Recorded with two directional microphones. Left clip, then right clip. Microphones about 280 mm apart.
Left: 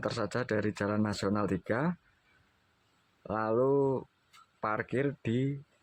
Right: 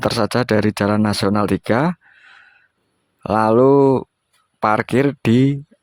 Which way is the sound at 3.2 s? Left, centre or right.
Right.